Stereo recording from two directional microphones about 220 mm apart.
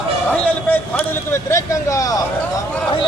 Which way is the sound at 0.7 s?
10° left (ahead or behind).